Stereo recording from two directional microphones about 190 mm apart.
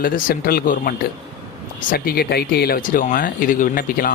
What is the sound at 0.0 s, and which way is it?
Speech, 50° left (ahead or behind).